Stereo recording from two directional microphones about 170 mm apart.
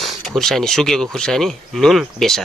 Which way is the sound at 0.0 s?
Centre (ahead or behind).